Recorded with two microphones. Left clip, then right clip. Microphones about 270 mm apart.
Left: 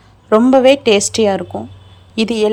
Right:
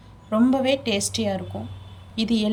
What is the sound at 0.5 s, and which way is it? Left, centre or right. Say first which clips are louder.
Speech: left 13 dB; centre.